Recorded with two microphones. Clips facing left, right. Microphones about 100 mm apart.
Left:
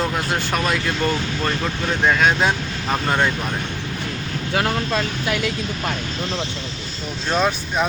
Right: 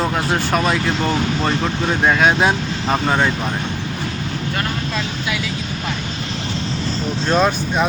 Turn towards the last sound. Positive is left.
turn(degrees=0)  # may be behind; listen again after turning